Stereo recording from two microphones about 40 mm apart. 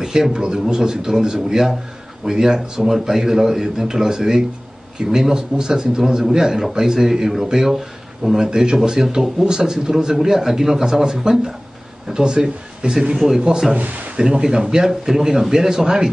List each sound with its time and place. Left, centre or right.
0.0 s a sound: centre
0.3 s a man's voice: centre
13.7 s speech: right
14.4 s a man's voice: centre